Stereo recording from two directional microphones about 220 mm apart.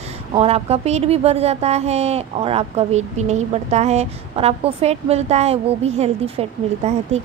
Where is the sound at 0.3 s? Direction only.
25° right (ahead or behind).